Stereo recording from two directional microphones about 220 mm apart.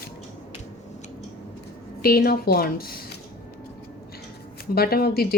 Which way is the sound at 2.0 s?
40° left (ahead or behind).